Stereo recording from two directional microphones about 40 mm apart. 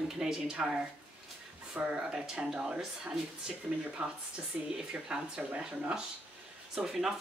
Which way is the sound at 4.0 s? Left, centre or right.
Centre.